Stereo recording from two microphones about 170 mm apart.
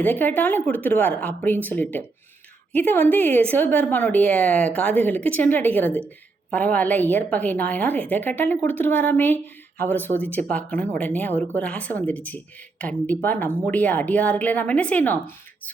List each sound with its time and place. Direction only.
0.0 s a woman's voice: 10° left (ahead or behind)